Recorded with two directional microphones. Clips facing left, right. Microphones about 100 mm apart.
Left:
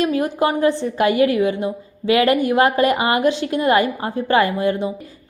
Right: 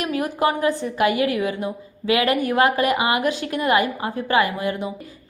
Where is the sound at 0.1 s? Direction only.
30° left (ahead or behind).